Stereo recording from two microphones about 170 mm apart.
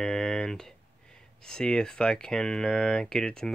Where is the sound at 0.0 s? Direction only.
5° left (ahead or behind).